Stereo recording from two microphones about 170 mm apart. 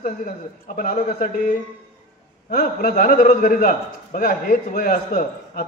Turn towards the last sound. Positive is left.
turn(degrees=55)  # may be behind; listen again after turning